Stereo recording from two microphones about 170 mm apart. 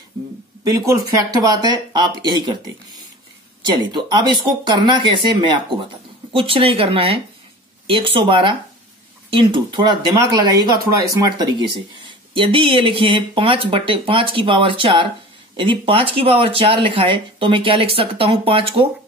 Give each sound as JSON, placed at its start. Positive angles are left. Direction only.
{"t": 1.3, "sound": "speech", "side_deg": -25}